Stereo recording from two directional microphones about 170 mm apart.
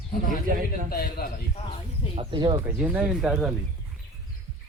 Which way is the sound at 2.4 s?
25° right (ahead or behind).